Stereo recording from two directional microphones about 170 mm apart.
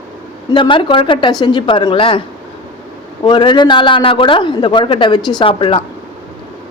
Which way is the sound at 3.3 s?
30° left (ahead or behind).